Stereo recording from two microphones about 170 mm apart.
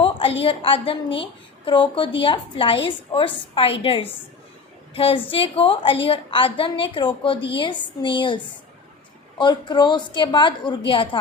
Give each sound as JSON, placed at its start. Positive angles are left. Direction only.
{"t": 0.0, "sound": "a sound", "side_deg": 30}
{"t": 0.4, "sound": "a woman's voice", "side_deg": 35}
{"t": 9.4, "sound": "a woman's voice", "side_deg": 25}